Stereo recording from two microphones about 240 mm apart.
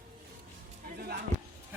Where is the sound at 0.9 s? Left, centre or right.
Right.